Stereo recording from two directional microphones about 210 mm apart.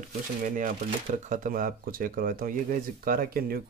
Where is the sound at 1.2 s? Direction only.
40° right (ahead or behind).